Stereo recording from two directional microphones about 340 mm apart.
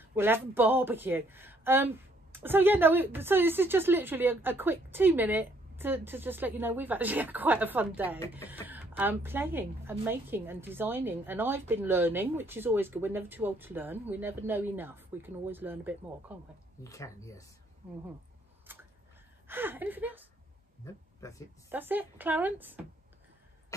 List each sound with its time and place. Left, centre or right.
0.0 s a woman's voice: centre
16.8 s speech: centre
18.7 s a sound: centre
19.4 s a woman's voice: centre
20.8 s speech: centre
21.6 s a woman's voice: centre